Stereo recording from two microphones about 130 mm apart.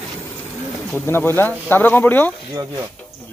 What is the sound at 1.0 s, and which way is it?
Speech, 15° left (ahead or behind).